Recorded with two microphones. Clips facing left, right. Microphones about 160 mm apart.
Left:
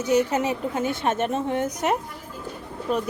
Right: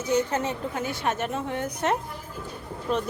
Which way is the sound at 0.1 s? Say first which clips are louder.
Left 3 dB; 15° left (ahead or behind).